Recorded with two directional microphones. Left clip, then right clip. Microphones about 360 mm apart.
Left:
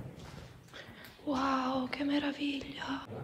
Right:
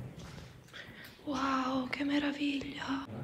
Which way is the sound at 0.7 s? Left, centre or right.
Centre.